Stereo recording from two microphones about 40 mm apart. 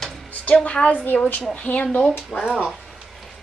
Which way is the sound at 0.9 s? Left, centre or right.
Left.